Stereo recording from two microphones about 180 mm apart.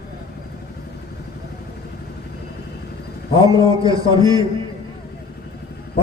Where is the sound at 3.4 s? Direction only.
20° right (ahead or behind).